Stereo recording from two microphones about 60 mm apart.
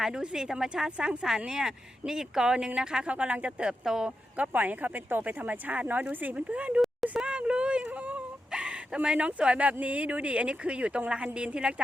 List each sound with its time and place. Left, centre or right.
0.0 s a woman's voice: centre
4.4 s a woman's voice: right
7.9 s whimper: right
8.4 s a woman's voice: centre